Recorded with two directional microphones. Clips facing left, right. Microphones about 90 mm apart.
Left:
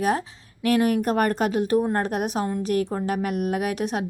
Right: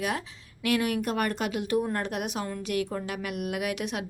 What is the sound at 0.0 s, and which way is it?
A woman's voice, 35° left (ahead or behind).